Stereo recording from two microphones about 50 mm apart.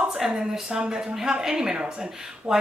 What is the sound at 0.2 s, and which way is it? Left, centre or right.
A woman's voice, centre.